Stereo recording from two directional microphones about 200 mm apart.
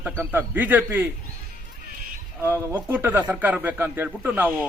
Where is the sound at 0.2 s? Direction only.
10° right (ahead or behind).